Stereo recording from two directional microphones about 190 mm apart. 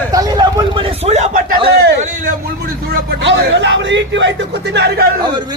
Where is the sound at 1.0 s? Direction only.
35° right (ahead or behind).